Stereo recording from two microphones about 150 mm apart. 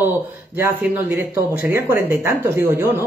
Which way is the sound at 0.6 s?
15° right (ahead or behind).